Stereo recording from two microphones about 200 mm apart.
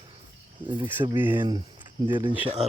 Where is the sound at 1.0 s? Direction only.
10° right (ahead or behind).